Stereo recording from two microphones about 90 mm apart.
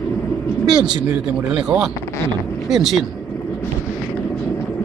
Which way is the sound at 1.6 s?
5° right (ahead or behind).